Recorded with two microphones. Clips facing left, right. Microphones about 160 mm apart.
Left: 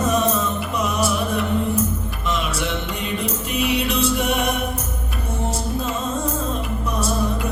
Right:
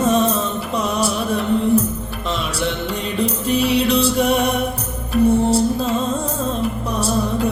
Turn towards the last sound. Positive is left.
turn(degrees=-30)  # may be behind; listen again after turning